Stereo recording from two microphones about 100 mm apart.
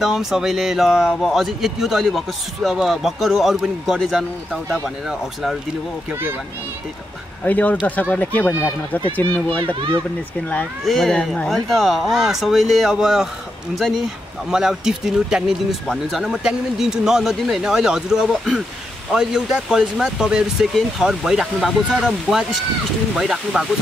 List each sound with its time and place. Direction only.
0.0 s speech: 5° right (ahead or behind)
7.4 s speech: 15° left (ahead or behind)
10.9 s speech: 5° left (ahead or behind)